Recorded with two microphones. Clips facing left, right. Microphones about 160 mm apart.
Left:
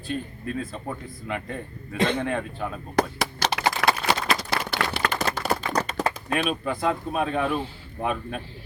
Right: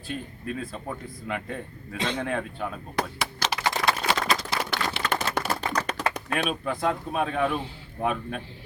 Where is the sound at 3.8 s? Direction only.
75° left (ahead or behind).